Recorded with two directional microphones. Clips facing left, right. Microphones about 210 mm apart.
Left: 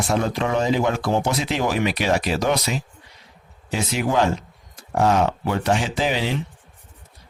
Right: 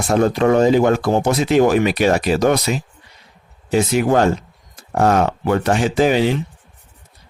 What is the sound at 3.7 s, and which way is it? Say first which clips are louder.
Speech: right 6 dB; 50° right (ahead or behind).